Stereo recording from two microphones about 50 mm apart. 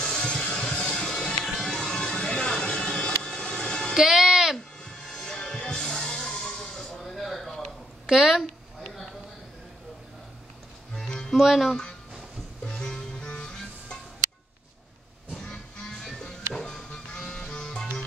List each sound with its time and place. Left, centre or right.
0.0 s music: centre
3.1 s vehicle: centre
3.9 s music: centre
4.8 s music: centre
8.1 s speech: centre
11.0 s music: centre
11.3 s speech: centre
12.6 s music: centre
15.3 s music: centre